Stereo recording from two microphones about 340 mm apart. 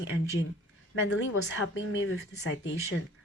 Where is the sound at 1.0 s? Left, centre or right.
Left.